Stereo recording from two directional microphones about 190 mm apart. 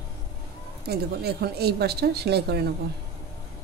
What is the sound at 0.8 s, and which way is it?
A woman's voice, 55° right (ahead or behind).